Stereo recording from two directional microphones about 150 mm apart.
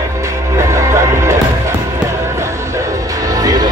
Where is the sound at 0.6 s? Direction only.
20° right (ahead or behind).